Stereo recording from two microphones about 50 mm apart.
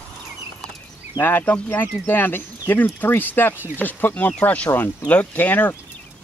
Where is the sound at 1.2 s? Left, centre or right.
Left.